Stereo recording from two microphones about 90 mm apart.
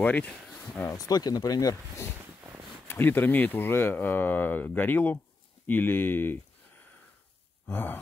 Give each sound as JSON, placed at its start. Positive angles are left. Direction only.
{"t": 0.0, "sound": "speech", "side_deg": 15}
{"t": 0.8, "sound": "speech", "side_deg": 40}
{"t": 2.9, "sound": "speech", "side_deg": 20}